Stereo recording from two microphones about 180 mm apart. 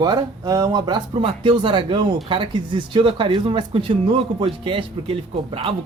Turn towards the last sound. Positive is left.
turn(degrees=-30)  # may be behind; listen again after turning